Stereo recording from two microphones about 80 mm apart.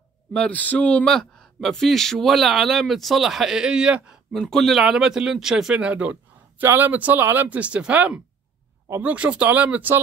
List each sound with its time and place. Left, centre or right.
0.3 s a man's voice: centre
4.3 s a man's voice: centre